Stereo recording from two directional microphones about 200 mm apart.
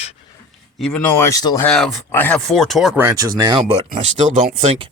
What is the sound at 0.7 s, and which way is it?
Speech, 5° left (ahead or behind).